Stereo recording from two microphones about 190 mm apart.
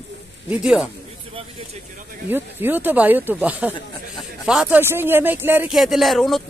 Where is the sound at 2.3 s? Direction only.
10° right (ahead or behind).